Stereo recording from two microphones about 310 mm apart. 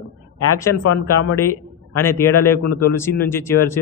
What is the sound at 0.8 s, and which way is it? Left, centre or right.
Speech, left.